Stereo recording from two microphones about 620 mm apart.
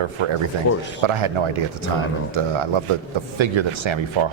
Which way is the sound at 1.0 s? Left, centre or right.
Right.